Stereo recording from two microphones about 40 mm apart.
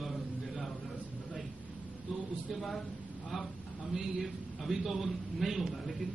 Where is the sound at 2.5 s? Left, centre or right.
Centre.